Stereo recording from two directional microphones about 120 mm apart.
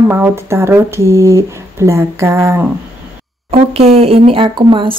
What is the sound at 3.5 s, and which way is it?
Speech, 55° right (ahead or behind).